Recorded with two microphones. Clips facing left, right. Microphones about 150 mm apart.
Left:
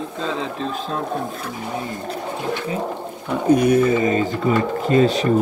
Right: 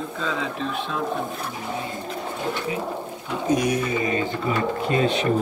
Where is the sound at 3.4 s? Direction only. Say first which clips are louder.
Left 7 dB; 55° left (ahead or behind).